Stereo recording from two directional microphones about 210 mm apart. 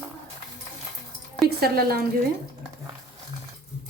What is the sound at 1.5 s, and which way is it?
Speech, 45° right (ahead or behind).